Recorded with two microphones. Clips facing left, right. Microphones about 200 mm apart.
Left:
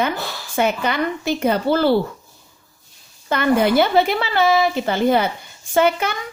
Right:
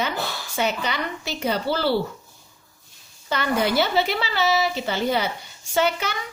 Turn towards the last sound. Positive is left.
turn(degrees=55)  # may be behind; listen again after turning